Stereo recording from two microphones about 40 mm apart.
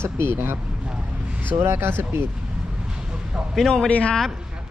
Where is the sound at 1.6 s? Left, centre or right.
Right.